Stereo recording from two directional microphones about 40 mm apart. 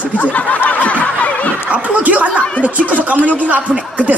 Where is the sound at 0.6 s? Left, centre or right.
Left.